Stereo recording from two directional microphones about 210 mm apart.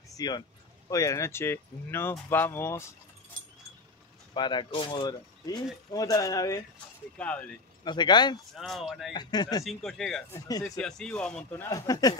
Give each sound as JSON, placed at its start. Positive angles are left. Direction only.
{"t": 0.2, "sound": "speech", "side_deg": 20}
{"t": 4.3, "sound": "speech", "side_deg": 20}
{"t": 7.2, "sound": "speech", "side_deg": 5}
{"t": 7.8, "sound": "speech", "side_deg": 20}
{"t": 8.5, "sound": "speech", "side_deg": 0}
{"t": 9.1, "sound": "speech", "side_deg": 20}
{"t": 9.8, "sound": "speech", "side_deg": 0}